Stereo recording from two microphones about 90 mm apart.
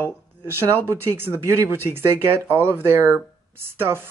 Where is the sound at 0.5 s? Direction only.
25° right (ahead or behind).